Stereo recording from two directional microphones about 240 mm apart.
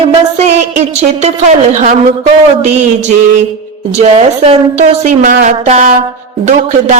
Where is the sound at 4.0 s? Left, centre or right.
Right.